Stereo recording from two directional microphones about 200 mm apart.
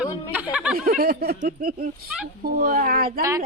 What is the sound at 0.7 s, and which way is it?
Speech, 45° right (ahead or behind).